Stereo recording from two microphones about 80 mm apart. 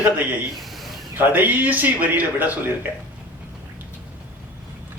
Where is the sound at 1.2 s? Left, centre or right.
Right.